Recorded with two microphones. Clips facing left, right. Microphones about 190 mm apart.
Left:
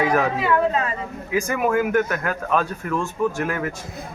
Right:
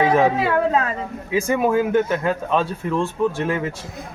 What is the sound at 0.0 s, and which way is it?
Speech, 30° right (ahead or behind).